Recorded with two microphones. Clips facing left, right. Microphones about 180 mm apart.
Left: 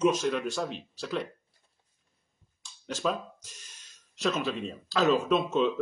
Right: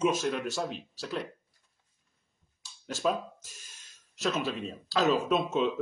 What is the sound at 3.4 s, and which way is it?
Music, 50° right (ahead or behind).